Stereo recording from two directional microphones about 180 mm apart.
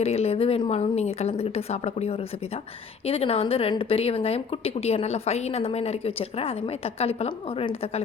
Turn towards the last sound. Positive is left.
turn(degrees=35)  # may be behind; listen again after turning